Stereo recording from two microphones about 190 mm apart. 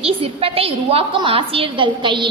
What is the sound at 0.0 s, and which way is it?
A woman's voice, 30° right (ahead or behind).